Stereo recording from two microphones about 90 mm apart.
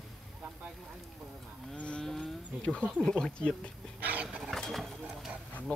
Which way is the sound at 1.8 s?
10° left (ahead or behind).